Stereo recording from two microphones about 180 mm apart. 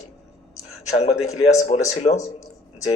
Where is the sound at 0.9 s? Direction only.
40° left (ahead or behind).